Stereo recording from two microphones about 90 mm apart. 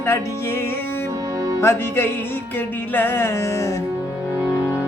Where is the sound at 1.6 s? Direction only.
30° left (ahead or behind).